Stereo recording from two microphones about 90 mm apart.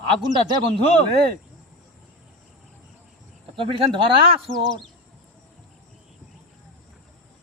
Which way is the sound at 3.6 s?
75° right (ahead or behind).